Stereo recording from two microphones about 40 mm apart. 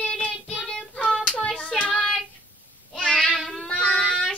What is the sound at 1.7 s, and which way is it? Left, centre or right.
Child singing, left.